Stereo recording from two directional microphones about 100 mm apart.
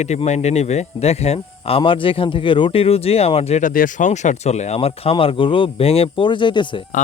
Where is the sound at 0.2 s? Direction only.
90° left; by 6.8 s 50° left (ahead or behind).